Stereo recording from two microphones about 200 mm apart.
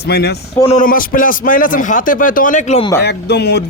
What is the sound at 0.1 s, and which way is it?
Speech, 55° left (ahead or behind).